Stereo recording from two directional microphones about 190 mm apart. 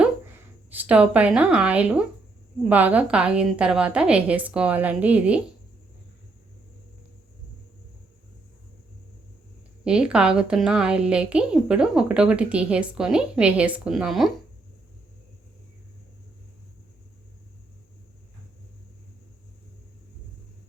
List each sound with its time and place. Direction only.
0.7 s a woman's voice: 10° right (ahead or behind)
9.8 s a woman's voice: 5° right (ahead or behind)